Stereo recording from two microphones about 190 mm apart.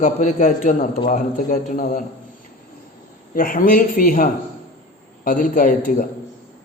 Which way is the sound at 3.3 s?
45° left (ahead or behind).